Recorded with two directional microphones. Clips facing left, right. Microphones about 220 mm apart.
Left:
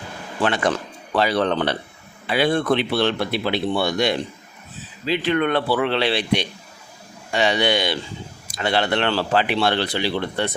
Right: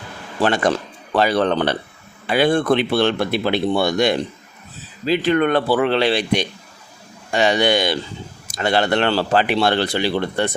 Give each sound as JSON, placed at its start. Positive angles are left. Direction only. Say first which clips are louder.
{"t": 0.4, "sound": "speech", "louder": "right 3 dB", "side_deg": -45}